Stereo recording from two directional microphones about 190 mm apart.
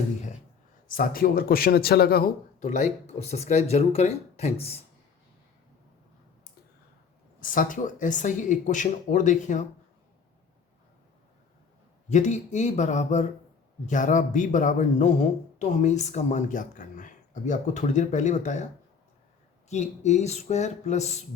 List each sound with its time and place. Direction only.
0.9 s speech: 45° left (ahead or behind)
2.6 s speech: 40° left (ahead or behind)
7.3 s speech: 45° left (ahead or behind)
12.0 s speech: 40° left (ahead or behind)
19.7 s speech: 35° left (ahead or behind)